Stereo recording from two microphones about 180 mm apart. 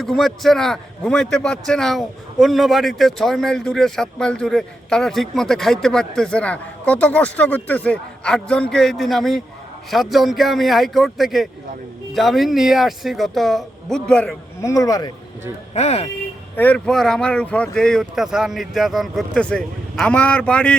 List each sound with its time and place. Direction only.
0.0 s a man's voice: centre (ahead or behind)
14.6 s speech: 20° left (ahead or behind)
15.7 s speech: 35° left (ahead or behind)
16.6 s a man's voice: 5° left (ahead or behind)